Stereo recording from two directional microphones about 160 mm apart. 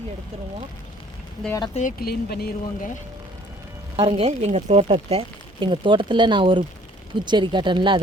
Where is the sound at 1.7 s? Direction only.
50° left (ahead or behind); by 2.9 s 75° left (ahead or behind).